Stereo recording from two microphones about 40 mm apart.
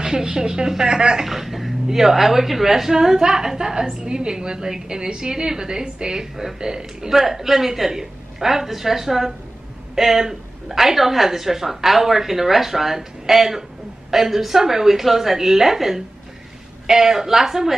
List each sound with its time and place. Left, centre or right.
0.0 s speech: centre
1.2 s speech: centre; by 7.1 s right
7.1 s speech: centre